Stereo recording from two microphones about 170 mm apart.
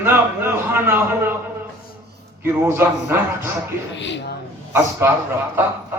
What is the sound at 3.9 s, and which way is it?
Speech, 90° left.